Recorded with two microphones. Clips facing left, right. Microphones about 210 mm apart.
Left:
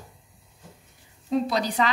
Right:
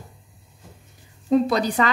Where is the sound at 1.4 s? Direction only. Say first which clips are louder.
Right 4 dB; 50° right (ahead or behind).